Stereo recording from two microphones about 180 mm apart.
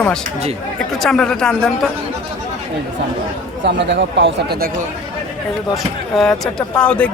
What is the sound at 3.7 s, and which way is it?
Speech, 75° right (ahead or behind).